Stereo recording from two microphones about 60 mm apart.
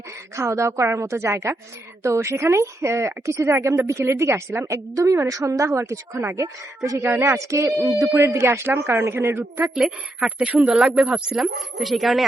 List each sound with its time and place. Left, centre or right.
0.3 s a woman's voice: right
6.3 s a woman's voice: right
7.0 s a woman's voice: right
7.8 s speech: right
8.1 s a woman's voice: right
9.6 s a woman's voice: centre
10.2 s speech: centre
10.7 s a woman's voice: centre